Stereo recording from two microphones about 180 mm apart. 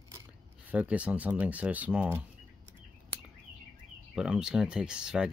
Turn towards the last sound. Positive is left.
turn(degrees=-5)  # may be behind; listen again after turning